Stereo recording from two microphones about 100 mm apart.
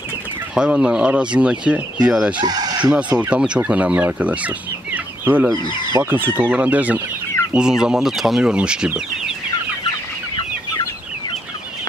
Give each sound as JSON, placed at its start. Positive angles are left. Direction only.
{"t": 0.6, "sound": "speech", "side_deg": -10}
{"t": 2.4, "sound": "speech", "side_deg": -40}
{"t": 2.9, "sound": "speech", "side_deg": -15}